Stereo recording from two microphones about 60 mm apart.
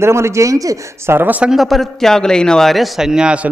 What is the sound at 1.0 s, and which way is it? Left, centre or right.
Speech, right.